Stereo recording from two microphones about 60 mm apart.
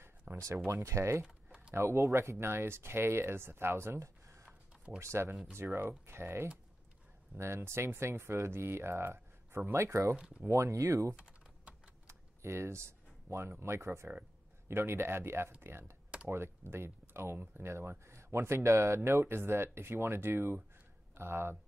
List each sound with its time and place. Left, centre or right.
0.0 s a sound: right
0.8 s speech: right
10.1 s speech: centre
10.5 s speech: right
11.1 s typing: centre
12.1 s speech: right